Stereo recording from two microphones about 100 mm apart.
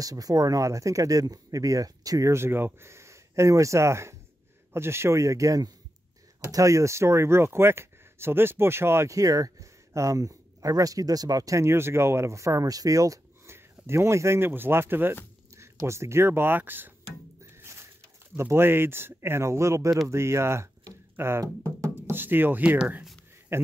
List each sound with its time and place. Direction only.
0.0 s speech: 35° right (ahead or behind); by 16.9 s 20° right (ahead or behind)
17.4 s music: 25° right (ahead or behind)
18.3 s speech: 25° right (ahead or behind)